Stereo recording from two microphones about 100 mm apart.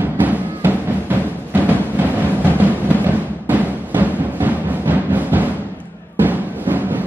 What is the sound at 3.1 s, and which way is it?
Timpani, 20° right (ahead or behind).